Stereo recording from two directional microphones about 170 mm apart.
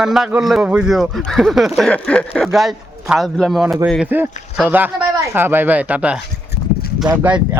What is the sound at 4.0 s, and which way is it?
Speech, 10° right (ahead or behind).